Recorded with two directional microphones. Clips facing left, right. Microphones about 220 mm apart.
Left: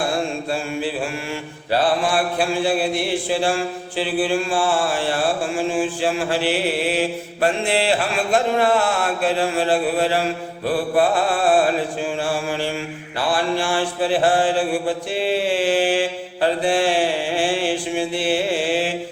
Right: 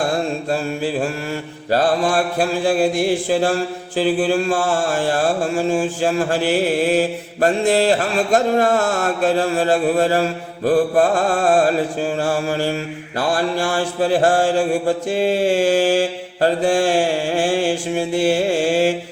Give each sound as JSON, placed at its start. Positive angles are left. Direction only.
{"t": 1.7, "sound": "mantra", "side_deg": -45}